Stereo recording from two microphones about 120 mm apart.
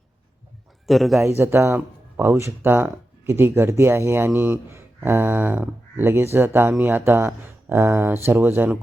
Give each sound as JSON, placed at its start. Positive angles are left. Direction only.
{"t": 0.9, "sound": "a man's voice", "side_deg": 0}
{"t": 1.4, "sound": "speech", "side_deg": -20}